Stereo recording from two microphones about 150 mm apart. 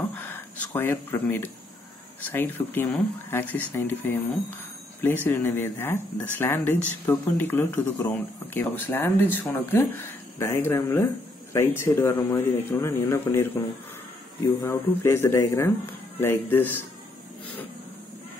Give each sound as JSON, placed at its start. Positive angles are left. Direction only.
{"t": 0.0, "sound": "a sound", "side_deg": 15}
{"t": 2.2, "sound": "speech", "side_deg": 15}
{"t": 14.6, "sound": "speech", "side_deg": 15}